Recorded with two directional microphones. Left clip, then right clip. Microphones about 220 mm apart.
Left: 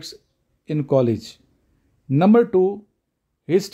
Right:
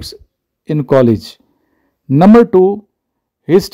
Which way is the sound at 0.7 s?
35° right (ahead or behind).